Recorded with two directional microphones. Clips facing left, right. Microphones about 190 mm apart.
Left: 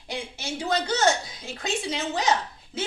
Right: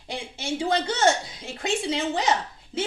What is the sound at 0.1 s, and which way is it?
A woman's voice, 30° right (ahead or behind).